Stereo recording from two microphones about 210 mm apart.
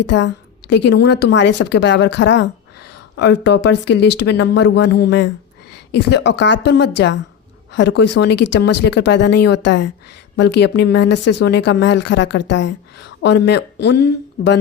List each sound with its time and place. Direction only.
0.1 s speech: 60° left (ahead or behind)